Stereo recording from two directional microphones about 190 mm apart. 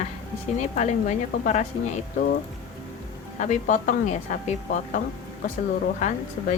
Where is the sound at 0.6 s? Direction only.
40° left (ahead or behind).